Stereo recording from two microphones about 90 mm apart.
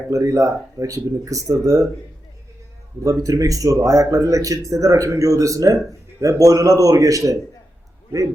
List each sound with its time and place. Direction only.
0.1 s speech: 35° right (ahead or behind)
3.0 s speech: 40° right (ahead or behind)